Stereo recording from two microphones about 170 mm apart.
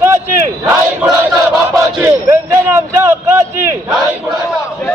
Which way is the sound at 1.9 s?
15° right (ahead or behind).